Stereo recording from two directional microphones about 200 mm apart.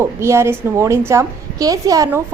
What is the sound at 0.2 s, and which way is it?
A woman's voice, 15° right (ahead or behind).